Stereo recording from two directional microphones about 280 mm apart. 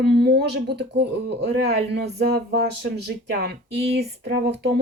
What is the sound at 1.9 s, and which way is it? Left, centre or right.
Speech, right.